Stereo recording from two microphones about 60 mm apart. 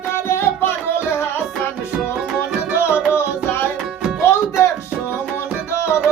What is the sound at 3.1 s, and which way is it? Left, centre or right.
Music, left.